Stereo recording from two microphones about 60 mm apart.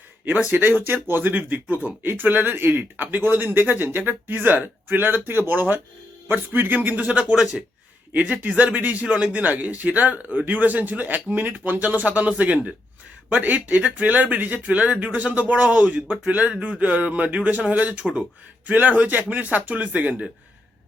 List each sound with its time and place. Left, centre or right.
0.4 s a man's voice: right
7.3 s speech: centre
8.1 s a man's voice: right